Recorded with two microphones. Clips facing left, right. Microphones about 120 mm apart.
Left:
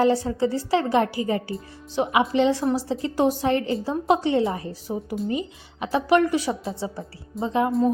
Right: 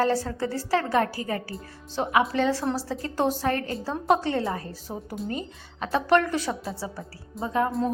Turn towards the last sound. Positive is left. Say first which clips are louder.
# left 3 dB
turn(degrees=20)  # may be behind; listen again after turning